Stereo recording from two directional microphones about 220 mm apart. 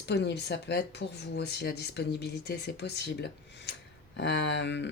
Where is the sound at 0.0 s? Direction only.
50° left (ahead or behind).